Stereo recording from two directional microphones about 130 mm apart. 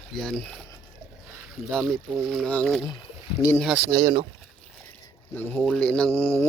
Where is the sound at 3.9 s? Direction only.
40° right (ahead or behind).